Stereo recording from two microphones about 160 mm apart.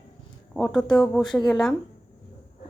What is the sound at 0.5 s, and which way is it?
A woman's voice, 5° left (ahead or behind).